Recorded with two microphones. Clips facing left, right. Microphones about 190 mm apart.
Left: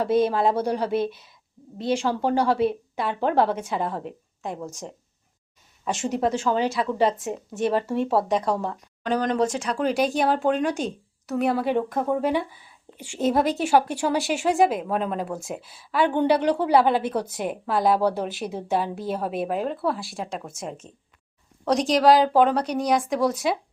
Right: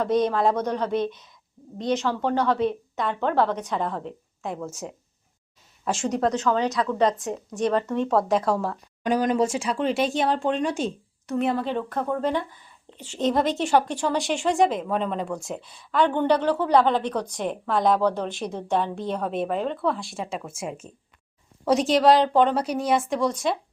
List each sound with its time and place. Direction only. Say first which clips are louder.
0.0 s a woman's voice: left 1 dB; 5° left (ahead or behind)
5.8 s a woman's voice: even; centre (ahead or behind)